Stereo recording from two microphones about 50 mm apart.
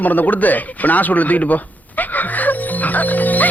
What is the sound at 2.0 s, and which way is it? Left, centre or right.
Music, left.